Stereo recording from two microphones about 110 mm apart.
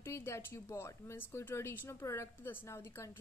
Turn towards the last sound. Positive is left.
turn(degrees=25)  # may be behind; listen again after turning